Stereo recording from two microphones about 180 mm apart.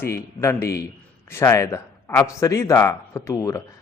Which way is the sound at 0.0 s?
15° left (ahead or behind).